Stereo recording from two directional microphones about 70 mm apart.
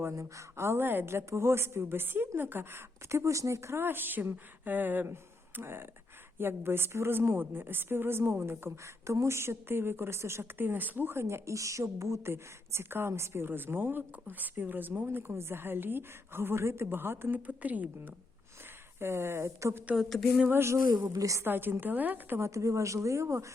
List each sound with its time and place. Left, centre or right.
0.2 s speech: right
17.4 s a woman's voice: right
18.9 s speech: right
20.0 s a sound: centre
20.5 s speech: right
20.7 s a woman's voice: right
21.4 s a woman's voice: right
22.4 s speech: right